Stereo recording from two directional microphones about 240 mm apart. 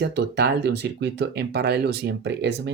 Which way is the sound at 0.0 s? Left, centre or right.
Right.